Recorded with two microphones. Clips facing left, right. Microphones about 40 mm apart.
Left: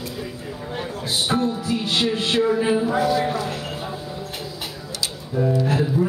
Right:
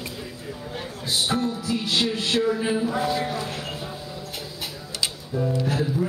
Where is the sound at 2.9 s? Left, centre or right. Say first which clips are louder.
Left 5 dB; left.